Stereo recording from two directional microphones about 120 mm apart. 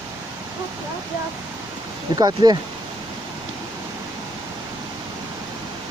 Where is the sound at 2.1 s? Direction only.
35° right (ahead or behind).